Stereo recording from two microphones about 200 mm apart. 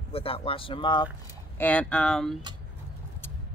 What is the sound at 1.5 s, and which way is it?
Speech, 10° left (ahead or behind).